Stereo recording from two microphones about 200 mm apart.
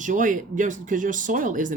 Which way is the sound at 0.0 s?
40° right (ahead or behind).